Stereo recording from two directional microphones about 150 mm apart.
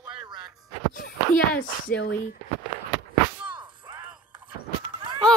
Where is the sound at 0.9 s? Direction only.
70° left (ahead or behind).